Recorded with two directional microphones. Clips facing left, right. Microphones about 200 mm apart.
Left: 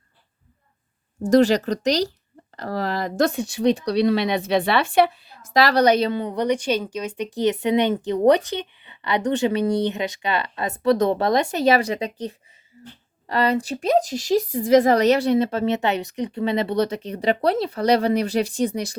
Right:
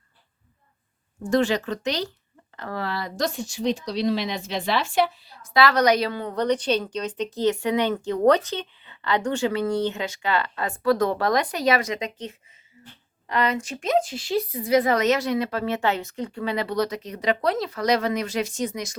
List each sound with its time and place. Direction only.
1.2 s a woman's voice: 35° left (ahead or behind); by 5.5 s 60° left (ahead or behind)
5.5 s a woman's voice: 35° left (ahead or behind)